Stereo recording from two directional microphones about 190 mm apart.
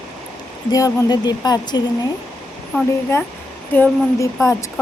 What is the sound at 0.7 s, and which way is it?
Speech, 20° left (ahead or behind).